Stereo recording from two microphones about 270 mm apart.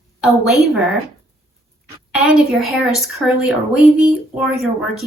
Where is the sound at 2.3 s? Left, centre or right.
Centre.